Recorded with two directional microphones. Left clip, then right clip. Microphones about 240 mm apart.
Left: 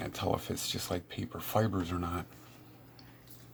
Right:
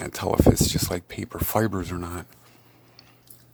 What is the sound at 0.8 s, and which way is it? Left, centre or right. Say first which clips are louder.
Speech: right 7 dB; right.